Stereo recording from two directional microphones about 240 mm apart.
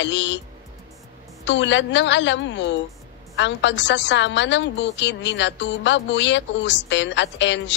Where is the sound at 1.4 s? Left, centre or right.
Left.